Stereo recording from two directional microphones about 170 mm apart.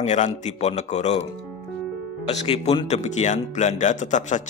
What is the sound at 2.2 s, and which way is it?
A man's voice, 35° left (ahead or behind).